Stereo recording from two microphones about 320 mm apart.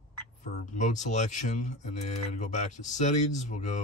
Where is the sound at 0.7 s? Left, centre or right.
Left.